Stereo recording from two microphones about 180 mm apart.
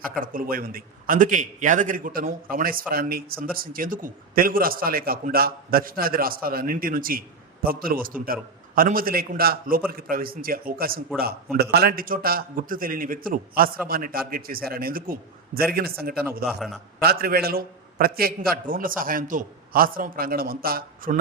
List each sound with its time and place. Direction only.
0.2 s a man's voice: 50° right (ahead or behind)
16.5 s a man's voice: centre (ahead or behind)
17.0 s a man's voice: 60° right (ahead or behind)